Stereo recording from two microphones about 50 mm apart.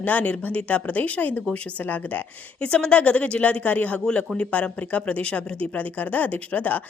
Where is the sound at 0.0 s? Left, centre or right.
Left.